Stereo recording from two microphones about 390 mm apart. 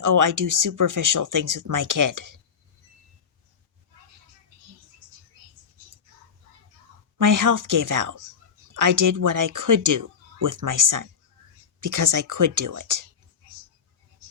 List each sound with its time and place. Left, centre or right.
0.0 s speech: right
7.2 s speech: right